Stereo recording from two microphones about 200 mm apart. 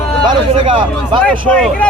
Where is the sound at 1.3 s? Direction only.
5° left (ahead or behind).